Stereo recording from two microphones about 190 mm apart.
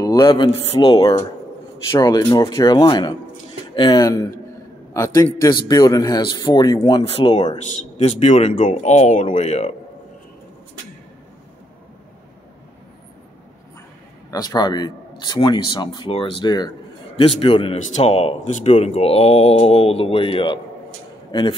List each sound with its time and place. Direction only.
0.0 s speech: 25° left (ahead or behind)
14.3 s a man's voice: 20° left (ahead or behind)